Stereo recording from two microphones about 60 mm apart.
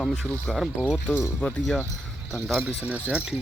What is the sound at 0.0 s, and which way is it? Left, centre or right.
Speech, centre.